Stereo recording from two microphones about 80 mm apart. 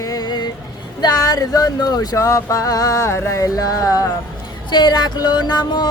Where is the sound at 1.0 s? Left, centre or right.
Left.